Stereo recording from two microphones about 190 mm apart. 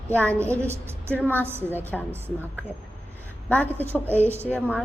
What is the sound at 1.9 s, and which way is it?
Speech, centre (ahead or behind).